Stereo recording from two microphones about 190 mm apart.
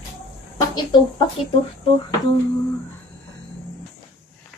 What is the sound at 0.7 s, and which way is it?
Speech, 25° left (ahead or behind).